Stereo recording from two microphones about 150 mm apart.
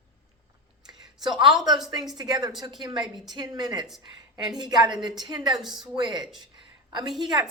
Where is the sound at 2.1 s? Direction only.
30° right (ahead or behind).